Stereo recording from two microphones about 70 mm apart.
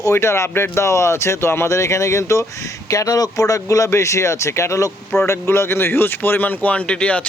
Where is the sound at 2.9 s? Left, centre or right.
Left.